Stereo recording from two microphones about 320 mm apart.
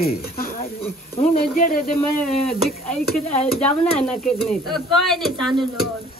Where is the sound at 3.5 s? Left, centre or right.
Centre.